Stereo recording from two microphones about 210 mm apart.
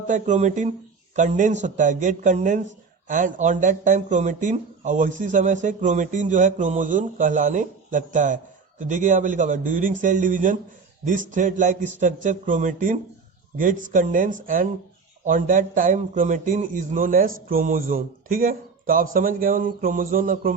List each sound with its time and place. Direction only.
0.1 s a man's voice: 35° right (ahead or behind)